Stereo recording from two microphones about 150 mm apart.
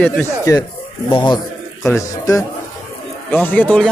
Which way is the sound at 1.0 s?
30° left (ahead or behind).